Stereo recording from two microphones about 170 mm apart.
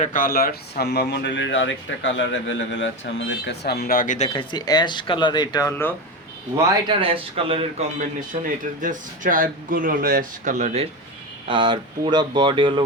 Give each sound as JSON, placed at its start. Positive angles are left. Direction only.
{"t": 0.0, "sound": "speech", "side_deg": 55}
{"t": 4.3, "sound": "speech", "side_deg": 30}
{"t": 6.8, "sound": "speech", "side_deg": -30}
{"t": 11.4, "sound": "speech", "side_deg": -30}